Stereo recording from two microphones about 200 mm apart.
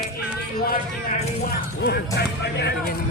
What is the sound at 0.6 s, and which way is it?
Speech, 50° left (ahead or behind).